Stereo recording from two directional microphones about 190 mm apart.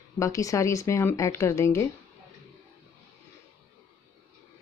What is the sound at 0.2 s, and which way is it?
Speech, 15° left (ahead or behind).